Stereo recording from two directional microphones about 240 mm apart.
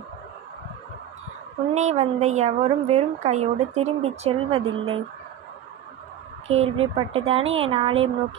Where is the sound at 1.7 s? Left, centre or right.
Right.